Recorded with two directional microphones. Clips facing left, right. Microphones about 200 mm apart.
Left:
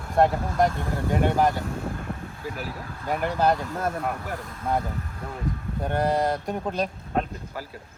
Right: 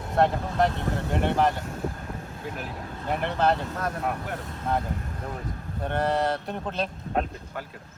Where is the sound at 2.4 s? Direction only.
5° left (ahead or behind).